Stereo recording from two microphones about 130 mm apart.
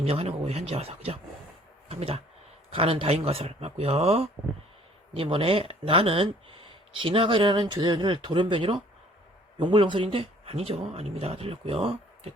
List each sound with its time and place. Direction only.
0.0 s speech: 50° right (ahead or behind)